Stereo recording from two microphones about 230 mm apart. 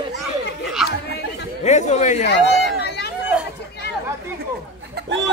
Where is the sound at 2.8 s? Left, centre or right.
Left.